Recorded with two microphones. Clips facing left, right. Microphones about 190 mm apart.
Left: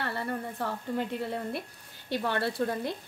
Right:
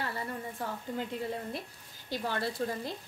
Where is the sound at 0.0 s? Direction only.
70° left (ahead or behind).